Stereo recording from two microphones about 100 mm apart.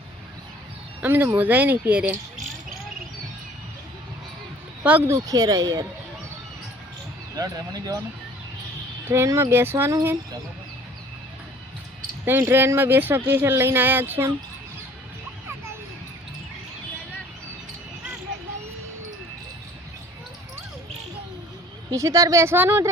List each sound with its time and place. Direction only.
1.0 s speech: 20° right (ahead or behind)
4.8 s speech: 15° right (ahead or behind)
5.0 s speech: 35° right (ahead or behind)
7.3 s speech: 40° right (ahead or behind)
9.0 s speech: 25° right (ahead or behind)
12.2 s speech: 20° right (ahead or behind)
21.9 s speech: 35° right (ahead or behind)